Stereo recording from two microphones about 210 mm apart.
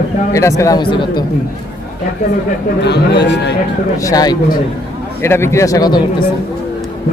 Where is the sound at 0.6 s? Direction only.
20° left (ahead or behind).